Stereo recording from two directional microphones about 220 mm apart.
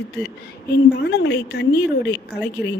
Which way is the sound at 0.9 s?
50° left (ahead or behind).